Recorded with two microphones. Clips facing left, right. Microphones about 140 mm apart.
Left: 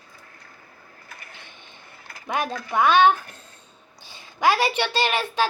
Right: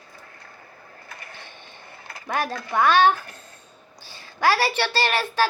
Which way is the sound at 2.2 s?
15° left (ahead or behind).